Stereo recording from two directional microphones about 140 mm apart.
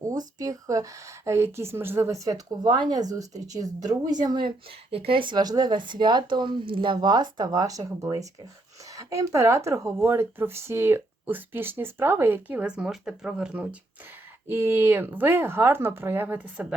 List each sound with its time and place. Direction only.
0.0 s speech: 25° right (ahead or behind)
2.6 s speech: 30° right (ahead or behind)
4.9 s speech: 40° right (ahead or behind); by 16.7 s 10° right (ahead or behind)